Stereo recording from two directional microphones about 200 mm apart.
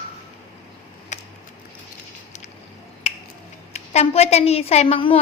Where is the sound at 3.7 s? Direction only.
30° left (ahead or behind).